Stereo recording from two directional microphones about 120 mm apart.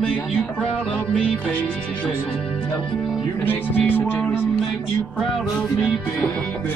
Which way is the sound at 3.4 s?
15° left (ahead or behind).